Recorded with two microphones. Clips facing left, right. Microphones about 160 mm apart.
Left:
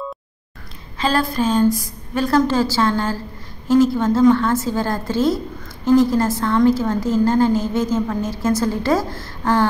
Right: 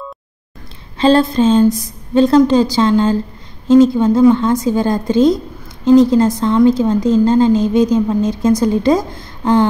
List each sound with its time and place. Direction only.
0.9 s a woman's voice: 25° right (ahead or behind)